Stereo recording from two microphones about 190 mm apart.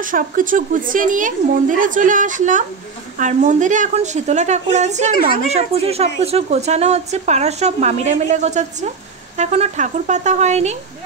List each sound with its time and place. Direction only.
0.0 s a woman's voice: 45° right (ahead or behind)